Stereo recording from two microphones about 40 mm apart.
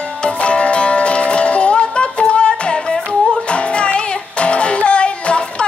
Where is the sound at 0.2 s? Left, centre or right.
Left.